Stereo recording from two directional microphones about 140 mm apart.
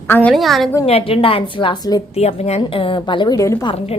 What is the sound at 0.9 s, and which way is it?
A woman's voice, 45° left (ahead or behind).